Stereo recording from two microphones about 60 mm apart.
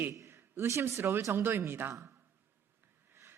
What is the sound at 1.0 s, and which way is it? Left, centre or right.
Speech, right.